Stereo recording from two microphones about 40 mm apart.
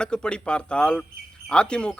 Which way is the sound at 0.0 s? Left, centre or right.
Left.